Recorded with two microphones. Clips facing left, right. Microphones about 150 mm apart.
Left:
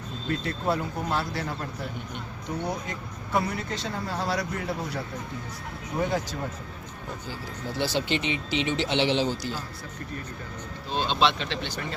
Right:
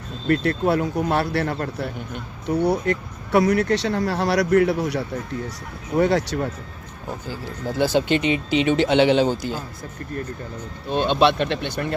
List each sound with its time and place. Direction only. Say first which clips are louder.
0.3 s speech: right 8 dB; 65° right (ahead or behind)
7.7 s speech: right 8 dB; 50° right (ahead or behind)
10.8 s speech: right 7 dB; 55° right (ahead or behind)